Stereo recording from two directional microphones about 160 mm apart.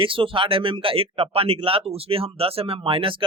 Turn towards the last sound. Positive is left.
turn(degrees=-35)  # may be behind; listen again after turning